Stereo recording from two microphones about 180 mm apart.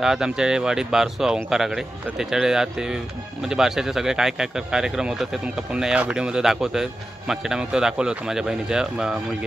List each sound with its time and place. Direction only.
0.0 s speech: 5° right (ahead or behind)